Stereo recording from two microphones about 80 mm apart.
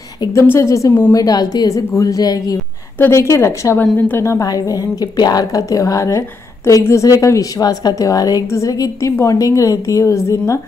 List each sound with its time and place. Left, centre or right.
0.3 s a woman's voice: left
1.1 s a woman's voice: left
3.0 s a woman's voice: left
5.0 s a woman's voice: left